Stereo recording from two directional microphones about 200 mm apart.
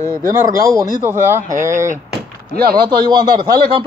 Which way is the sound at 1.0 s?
10° right (ahead or behind).